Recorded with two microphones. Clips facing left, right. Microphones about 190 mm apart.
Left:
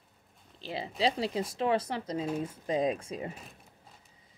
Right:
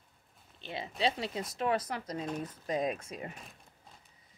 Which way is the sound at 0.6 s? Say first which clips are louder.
Left 3 dB; 30° left (ahead or behind).